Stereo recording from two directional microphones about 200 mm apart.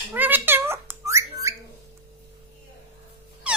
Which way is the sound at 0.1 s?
10° right (ahead or behind).